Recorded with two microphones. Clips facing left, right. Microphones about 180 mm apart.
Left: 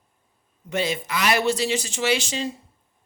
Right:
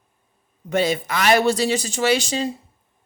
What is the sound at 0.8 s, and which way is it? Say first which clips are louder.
Speech: right 4 dB; 45° right (ahead or behind).